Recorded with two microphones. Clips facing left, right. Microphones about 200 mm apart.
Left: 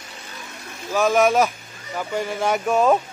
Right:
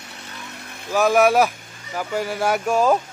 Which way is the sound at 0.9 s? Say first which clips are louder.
Right 1 dB; 5° right (ahead or behind).